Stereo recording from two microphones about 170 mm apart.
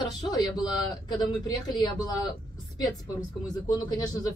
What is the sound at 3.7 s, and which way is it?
Speech, 25° left (ahead or behind).